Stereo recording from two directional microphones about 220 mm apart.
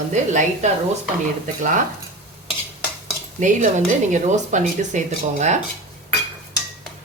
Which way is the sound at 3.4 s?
35° right (ahead or behind).